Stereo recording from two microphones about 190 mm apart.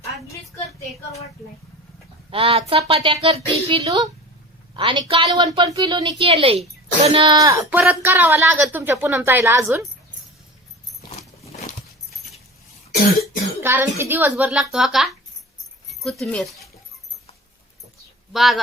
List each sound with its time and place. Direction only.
2.3 s speech: 30° right (ahead or behind)
3.8 s a woman's voice: 20° right (ahead or behind)
13.6 s a woman's voice: 10° right (ahead or behind)
18.3 s speech: centre (ahead or behind)